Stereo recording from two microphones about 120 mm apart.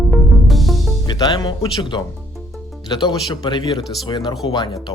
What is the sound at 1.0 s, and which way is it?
Speech, 40° left (ahead or behind).